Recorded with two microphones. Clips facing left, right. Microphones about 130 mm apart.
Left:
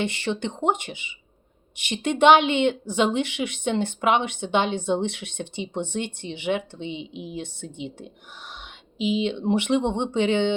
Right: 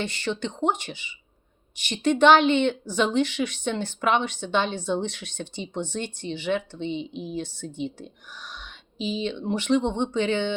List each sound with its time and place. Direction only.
0.0 s speech: 25° left (ahead or behind)